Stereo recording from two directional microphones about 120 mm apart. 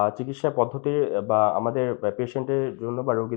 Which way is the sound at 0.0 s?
30° left (ahead or behind).